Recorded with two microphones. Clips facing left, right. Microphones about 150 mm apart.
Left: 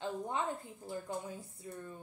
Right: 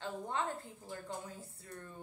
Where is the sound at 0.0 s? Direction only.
15° left (ahead or behind).